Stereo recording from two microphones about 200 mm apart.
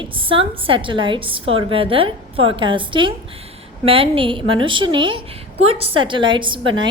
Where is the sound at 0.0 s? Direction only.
25° right (ahead or behind).